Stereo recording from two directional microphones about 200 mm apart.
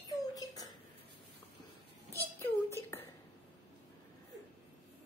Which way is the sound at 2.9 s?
15° left (ahead or behind).